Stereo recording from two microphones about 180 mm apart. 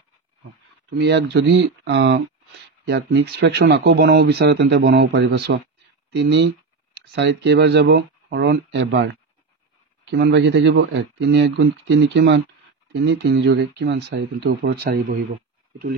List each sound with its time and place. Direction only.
0.9 s speech: 75° right (ahead or behind)
2.9 s speech: 70° right (ahead or behind)